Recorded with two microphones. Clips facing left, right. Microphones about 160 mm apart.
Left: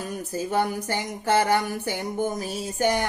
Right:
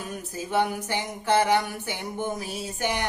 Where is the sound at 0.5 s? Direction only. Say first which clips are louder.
Right 1 dB; 40° left (ahead or behind).